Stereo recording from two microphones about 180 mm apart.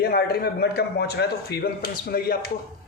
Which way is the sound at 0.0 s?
60° left (ahead or behind).